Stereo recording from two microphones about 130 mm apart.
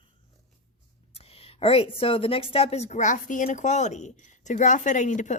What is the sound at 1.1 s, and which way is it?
Speech, 50° left (ahead or behind).